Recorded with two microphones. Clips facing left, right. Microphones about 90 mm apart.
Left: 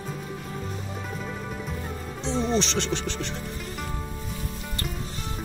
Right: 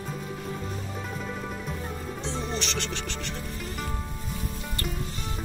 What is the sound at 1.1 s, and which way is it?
Music, centre (ahead or behind).